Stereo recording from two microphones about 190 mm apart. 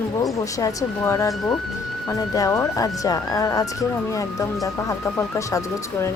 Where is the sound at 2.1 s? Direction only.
20° left (ahead or behind).